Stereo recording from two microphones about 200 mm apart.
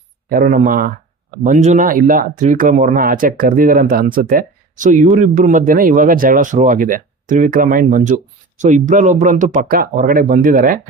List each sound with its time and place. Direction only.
0.3 s speech: 45° right (ahead or behind)